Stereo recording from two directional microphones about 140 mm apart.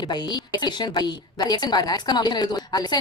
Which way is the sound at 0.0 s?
30° left (ahead or behind).